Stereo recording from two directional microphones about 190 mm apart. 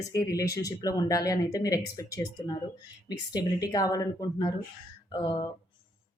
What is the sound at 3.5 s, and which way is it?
Speech, 20° left (ahead or behind).